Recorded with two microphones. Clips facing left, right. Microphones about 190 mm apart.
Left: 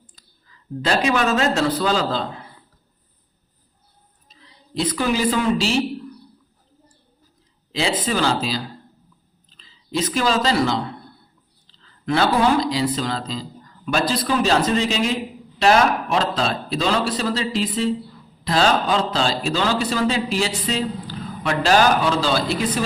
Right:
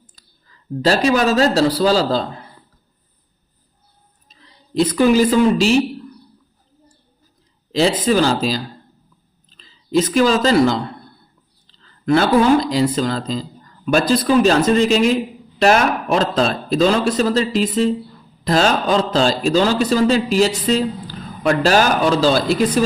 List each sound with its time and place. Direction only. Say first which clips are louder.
0.4 s a man's voice: right 6 dB; 40° right (ahead or behind)
4.7 s speech: right 8 dB; 45° right (ahead or behind)
7.7 s a man's voice: right 7 dB; 40° right (ahead or behind)
12.0 s a man's voice: right 5 dB; 45° right (ahead or behind)